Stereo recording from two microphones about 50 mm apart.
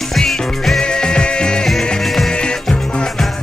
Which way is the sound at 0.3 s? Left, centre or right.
Centre.